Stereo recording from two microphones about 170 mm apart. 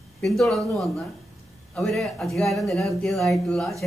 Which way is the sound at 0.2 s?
Centre (ahead or behind).